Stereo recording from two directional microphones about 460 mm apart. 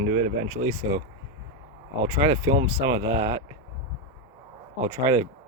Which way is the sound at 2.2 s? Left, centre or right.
Centre.